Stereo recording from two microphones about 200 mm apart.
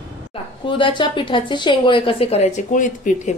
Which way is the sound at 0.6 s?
25° left (ahead or behind).